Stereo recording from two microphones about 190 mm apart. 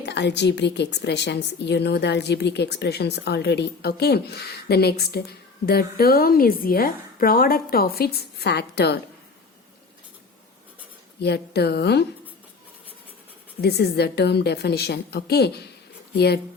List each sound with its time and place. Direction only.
0.0 s a woman's voice: 65° left (ahead or behind)
11.2 s a woman's voice: 60° left (ahead or behind)
13.6 s a woman's voice: 60° left (ahead or behind)